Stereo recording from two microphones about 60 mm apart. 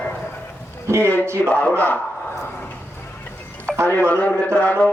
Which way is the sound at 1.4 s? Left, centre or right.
Left.